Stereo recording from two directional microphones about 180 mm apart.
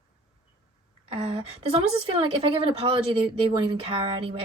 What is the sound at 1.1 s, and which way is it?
A woman's voice, 35° right (ahead or behind).